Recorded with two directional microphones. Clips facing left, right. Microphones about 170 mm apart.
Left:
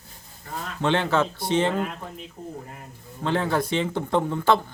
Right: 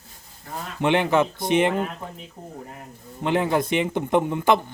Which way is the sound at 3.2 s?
15° right (ahead or behind).